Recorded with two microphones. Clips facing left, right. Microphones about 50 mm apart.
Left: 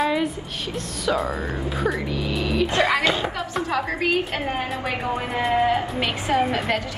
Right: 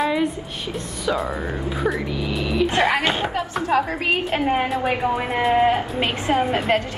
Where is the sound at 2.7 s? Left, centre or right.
Right.